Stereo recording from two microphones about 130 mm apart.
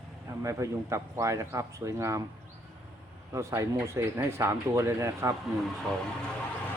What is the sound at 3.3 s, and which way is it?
Speech, 25° right (ahead or behind).